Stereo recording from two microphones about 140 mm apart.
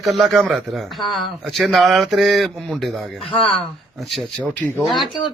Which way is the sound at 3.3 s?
40° left (ahead or behind).